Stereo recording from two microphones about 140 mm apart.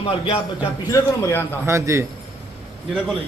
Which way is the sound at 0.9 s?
20° left (ahead or behind).